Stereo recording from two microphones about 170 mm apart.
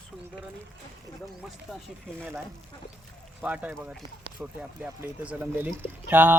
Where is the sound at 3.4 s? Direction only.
10° right (ahead or behind).